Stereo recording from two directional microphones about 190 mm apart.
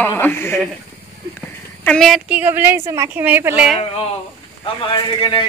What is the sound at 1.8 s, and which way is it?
A woman's voice, 5° left (ahead or behind).